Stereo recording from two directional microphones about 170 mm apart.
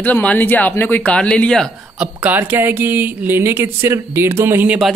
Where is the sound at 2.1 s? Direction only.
10° right (ahead or behind).